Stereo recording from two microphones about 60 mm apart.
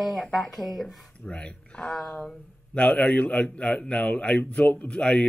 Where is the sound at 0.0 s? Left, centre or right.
Centre.